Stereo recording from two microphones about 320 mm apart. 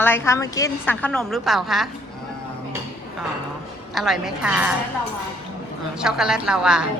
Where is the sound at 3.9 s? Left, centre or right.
Centre.